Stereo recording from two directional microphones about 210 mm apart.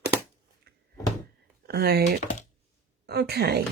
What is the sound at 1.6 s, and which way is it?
Speech, 50° right (ahead or behind).